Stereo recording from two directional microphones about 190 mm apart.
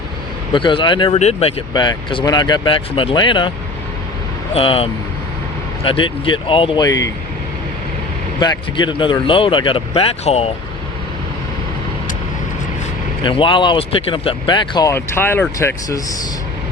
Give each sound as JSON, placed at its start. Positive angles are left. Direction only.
{"t": 0.5, "sound": "speech", "side_deg": 25}
{"t": 4.5, "sound": "speech", "side_deg": 30}
{"t": 8.4, "sound": "speech", "side_deg": 25}
{"t": 13.2, "sound": "speech", "side_deg": 25}